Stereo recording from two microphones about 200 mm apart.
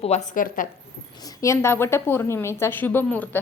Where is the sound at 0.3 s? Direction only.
45° left (ahead or behind).